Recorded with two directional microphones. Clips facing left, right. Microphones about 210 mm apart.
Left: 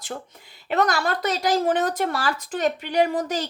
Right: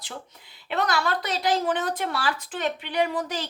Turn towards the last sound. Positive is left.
turn(degrees=45)  # may be behind; listen again after turning